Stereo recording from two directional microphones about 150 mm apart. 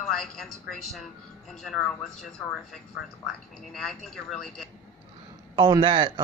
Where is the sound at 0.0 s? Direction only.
Centre (ahead or behind).